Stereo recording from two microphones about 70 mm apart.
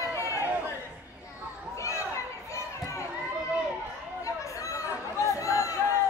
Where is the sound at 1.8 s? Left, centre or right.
Left.